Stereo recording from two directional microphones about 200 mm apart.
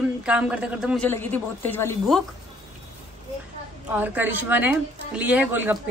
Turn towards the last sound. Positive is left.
turn(degrees=-10)  # may be behind; listen again after turning